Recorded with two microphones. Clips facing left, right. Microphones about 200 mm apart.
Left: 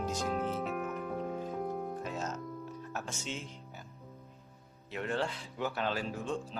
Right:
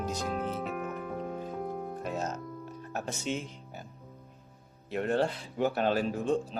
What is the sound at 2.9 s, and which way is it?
Speech, 60° right (ahead or behind).